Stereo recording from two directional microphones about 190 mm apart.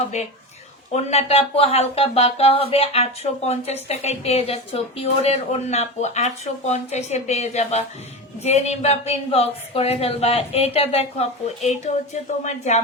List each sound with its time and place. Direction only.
0.1 s speech: 35° left (ahead or behind)